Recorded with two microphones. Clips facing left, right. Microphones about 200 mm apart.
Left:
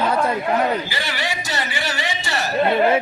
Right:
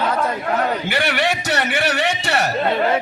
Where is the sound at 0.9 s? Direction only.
65° right (ahead or behind).